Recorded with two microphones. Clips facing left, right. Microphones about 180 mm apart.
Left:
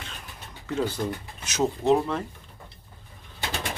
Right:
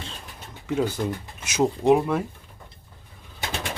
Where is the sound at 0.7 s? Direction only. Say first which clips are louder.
Right 3 dB; 10° right (ahead or behind).